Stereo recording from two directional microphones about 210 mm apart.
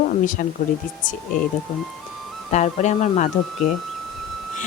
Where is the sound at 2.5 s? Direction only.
35° left (ahead or behind).